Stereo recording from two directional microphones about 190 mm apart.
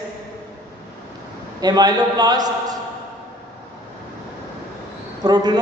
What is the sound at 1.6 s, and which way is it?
A man's voice, 20° right (ahead or behind).